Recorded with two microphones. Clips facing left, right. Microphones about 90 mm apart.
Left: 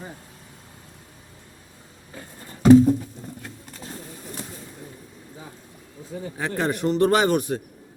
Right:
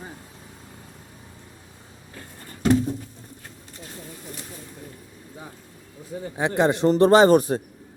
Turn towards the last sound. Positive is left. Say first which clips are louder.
# right 5 dB
turn(degrees=-35)  # may be behind; listen again after turning